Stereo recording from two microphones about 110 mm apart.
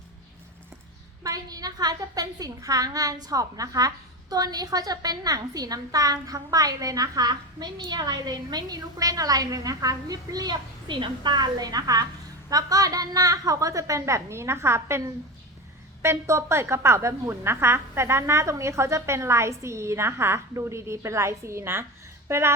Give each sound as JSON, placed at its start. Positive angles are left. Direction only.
{"t": 1.2, "sound": "a woman's voice", "side_deg": -35}